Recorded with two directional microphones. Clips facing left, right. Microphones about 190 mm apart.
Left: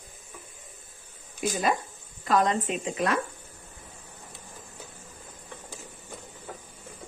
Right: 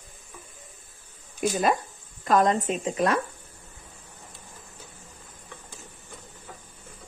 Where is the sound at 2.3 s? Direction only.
45° right (ahead or behind).